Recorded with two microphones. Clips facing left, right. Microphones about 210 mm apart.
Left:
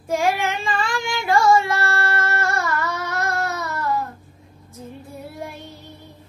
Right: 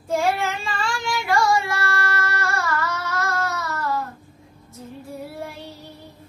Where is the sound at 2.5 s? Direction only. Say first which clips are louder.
Left 1 dB; 15° left (ahead or behind).